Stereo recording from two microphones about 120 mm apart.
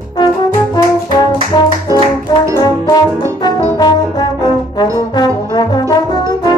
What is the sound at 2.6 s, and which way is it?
Brass instrument, 30° left (ahead or behind).